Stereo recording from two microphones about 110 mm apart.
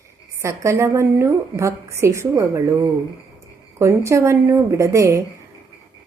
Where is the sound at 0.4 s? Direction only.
25° right (ahead or behind).